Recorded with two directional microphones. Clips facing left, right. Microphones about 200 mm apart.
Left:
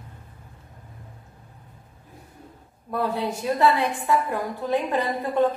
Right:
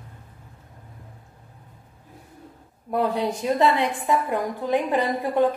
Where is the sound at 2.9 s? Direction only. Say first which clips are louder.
Right 3 dB; 15° right (ahead or behind).